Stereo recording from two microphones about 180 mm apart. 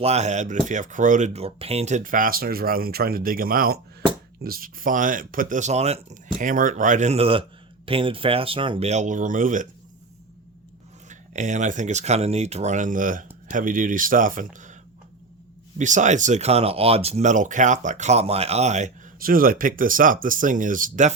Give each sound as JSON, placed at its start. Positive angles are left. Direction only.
{"t": 0.0, "sound": "speech", "side_deg": -35}
{"t": 11.1, "sound": "speech", "side_deg": -40}
{"t": 15.8, "sound": "speech", "side_deg": -45}